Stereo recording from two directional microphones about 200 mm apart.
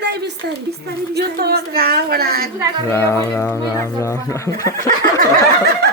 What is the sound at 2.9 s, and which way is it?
Speech, 15° left (ahead or behind).